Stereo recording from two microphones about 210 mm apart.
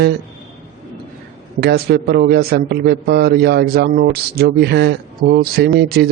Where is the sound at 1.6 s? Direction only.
50° right (ahead or behind).